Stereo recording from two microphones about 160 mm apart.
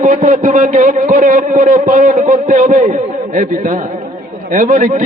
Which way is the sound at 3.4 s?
55° right (ahead or behind).